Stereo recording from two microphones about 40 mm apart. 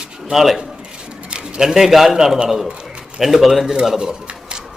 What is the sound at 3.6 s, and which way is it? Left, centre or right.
Speech, centre.